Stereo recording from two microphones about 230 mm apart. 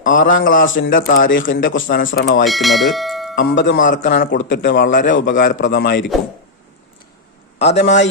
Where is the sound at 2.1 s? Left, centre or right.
Left.